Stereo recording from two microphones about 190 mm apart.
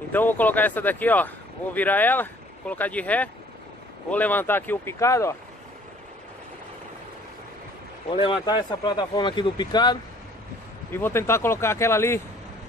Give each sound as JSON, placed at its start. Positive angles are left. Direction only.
{"t": 0.1, "sound": "speech", "side_deg": 10}
{"t": 8.1, "sound": "speech", "side_deg": 25}
{"t": 10.9, "sound": "speech", "side_deg": 10}